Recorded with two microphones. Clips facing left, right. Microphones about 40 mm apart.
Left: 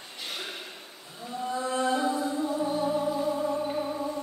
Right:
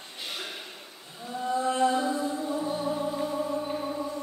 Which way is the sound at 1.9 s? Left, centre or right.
Left.